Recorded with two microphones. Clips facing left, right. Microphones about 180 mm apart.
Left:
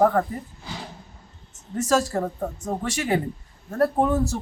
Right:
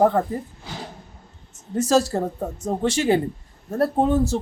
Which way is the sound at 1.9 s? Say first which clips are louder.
Right 2 dB; 30° right (ahead or behind).